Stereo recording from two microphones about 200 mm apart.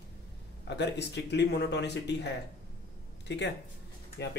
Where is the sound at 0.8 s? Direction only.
55° left (ahead or behind).